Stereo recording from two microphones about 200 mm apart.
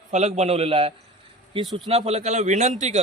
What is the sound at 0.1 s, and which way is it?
A man's voice, 35° right (ahead or behind).